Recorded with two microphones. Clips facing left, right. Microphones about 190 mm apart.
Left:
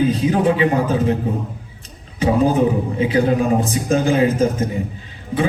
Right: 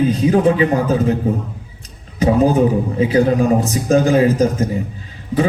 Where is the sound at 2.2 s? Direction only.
35° right (ahead or behind).